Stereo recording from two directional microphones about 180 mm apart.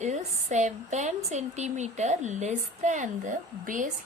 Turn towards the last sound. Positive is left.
turn(degrees=-45)  # may be behind; listen again after turning